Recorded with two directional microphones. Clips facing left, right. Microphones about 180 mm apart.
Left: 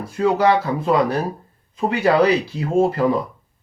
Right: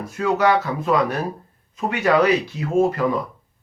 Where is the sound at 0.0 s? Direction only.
30° left (ahead or behind).